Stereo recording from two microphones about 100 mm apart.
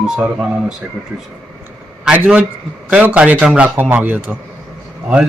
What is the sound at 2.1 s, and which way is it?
Speech, 15° right (ahead or behind).